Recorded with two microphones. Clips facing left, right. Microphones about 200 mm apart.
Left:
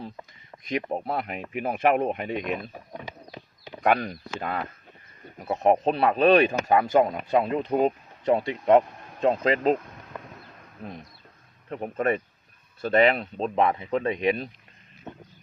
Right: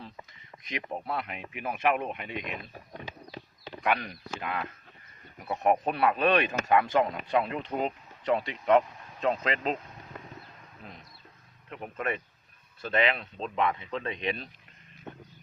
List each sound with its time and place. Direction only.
0.7 s speech: 35° left (ahead or behind)
3.8 s speech: 40° left (ahead or behind)
11.7 s speech: 40° left (ahead or behind)